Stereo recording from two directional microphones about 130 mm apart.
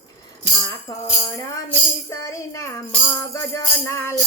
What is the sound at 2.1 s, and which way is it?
Music, 25° left (ahead or behind).